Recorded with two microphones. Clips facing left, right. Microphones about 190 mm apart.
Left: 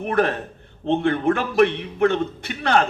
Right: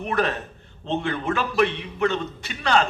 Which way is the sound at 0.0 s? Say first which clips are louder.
Left 4 dB; 55° left (ahead or behind).